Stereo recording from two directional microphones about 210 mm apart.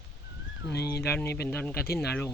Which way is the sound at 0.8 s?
50° left (ahead or behind).